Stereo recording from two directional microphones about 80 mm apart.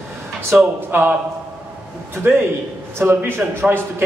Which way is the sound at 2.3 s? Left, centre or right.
Right.